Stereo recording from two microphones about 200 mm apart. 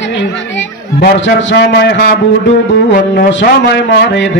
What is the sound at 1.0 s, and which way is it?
Mantra, 60° left (ahead or behind).